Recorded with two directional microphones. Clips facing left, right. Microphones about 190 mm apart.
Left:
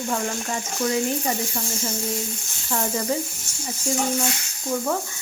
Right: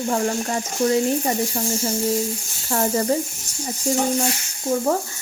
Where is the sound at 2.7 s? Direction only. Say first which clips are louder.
Right 5 dB; 45° right (ahead or behind).